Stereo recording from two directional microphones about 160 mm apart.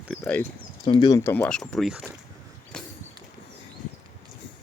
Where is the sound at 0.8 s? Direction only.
30° left (ahead or behind).